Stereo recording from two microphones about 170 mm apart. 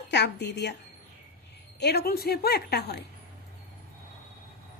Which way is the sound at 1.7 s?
75° left (ahead or behind).